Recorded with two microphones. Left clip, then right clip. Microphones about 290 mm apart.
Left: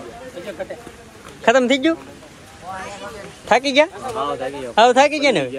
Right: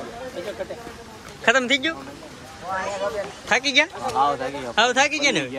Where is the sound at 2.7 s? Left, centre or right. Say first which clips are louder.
Right 7 dB; right.